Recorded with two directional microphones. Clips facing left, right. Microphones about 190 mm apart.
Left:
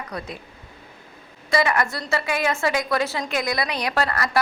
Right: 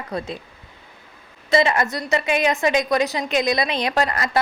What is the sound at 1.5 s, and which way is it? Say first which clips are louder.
A woman's voice: right 3 dB; 25° right (ahead or behind).